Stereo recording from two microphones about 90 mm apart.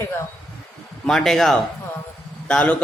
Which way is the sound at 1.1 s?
5° left (ahead or behind).